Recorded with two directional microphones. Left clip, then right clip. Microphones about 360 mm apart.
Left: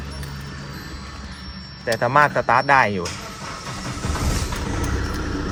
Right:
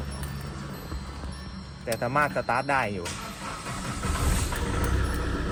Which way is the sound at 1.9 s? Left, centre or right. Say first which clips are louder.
Left 9 dB; left.